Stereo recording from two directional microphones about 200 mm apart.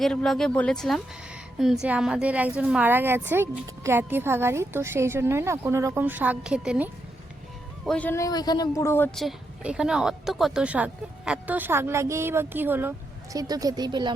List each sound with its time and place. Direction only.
0.0 s a woman's voice: centre (ahead or behind)
7.9 s a man's voice: 5° left (ahead or behind)
9.1 s a woman's voice: centre (ahead or behind); by 14.1 s 20° right (ahead or behind)